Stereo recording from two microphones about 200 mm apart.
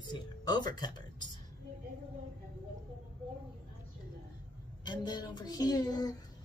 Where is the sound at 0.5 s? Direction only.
20° left (ahead or behind).